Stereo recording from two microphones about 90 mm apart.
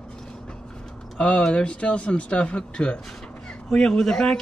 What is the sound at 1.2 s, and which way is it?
Speech, 10° left (ahead or behind).